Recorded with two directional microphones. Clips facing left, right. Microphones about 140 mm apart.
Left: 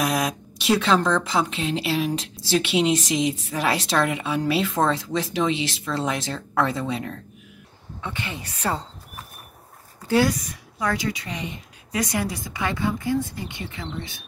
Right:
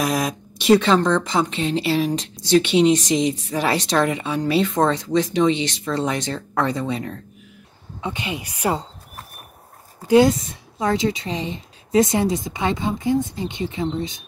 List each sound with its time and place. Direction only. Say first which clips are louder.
0.0 s speech: right 2 dB; centre (ahead or behind)
8.0 s speech: right 5 dB; 15° right (ahead or behind)
10.0 s speech: right 6 dB; 20° right (ahead or behind)